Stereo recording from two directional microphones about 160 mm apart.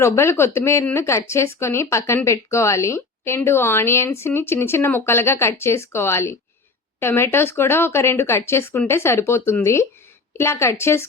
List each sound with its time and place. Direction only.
0.0 s a woman's voice: 15° left (ahead or behind)